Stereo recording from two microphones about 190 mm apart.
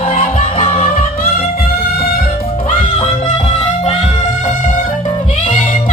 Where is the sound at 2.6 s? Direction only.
35° left (ahead or behind).